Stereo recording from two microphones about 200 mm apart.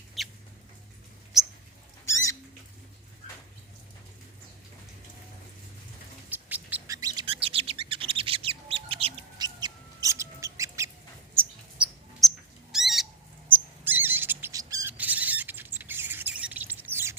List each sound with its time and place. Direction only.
0.2 s rodents: centre (ahead or behind)
1.3 s mouse: centre (ahead or behind)
6.3 s bird: 10° right (ahead or behind)
12.2 s a sound: centre (ahead or behind)
12.7 s owl: centre (ahead or behind)
13.5 s bird: 10° right (ahead or behind)